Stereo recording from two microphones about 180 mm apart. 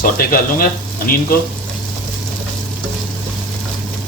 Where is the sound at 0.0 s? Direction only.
50° left (ahead or behind).